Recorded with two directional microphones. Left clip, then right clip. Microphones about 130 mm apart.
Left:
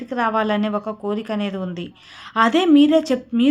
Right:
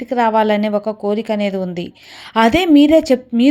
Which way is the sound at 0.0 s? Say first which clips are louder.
Right 6 dB; 35° right (ahead or behind).